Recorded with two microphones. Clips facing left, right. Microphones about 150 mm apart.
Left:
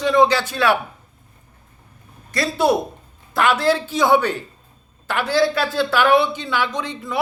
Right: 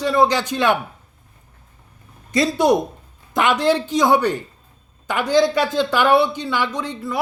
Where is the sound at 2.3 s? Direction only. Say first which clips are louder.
Right 2 dB; 20° right (ahead or behind).